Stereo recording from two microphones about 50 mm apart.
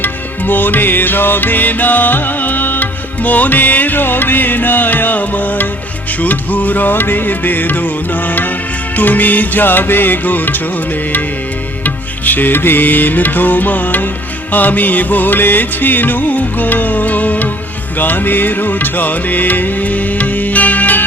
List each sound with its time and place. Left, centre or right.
0.0 s music: left
11.8 s music: left